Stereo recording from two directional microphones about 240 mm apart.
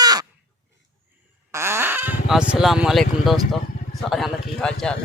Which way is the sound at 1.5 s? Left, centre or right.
Centre.